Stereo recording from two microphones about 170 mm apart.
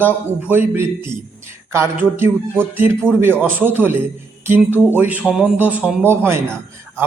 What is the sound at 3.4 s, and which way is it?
A man's voice, 10° right (ahead or behind).